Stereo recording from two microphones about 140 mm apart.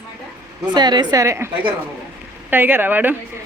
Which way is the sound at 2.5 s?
15° right (ahead or behind).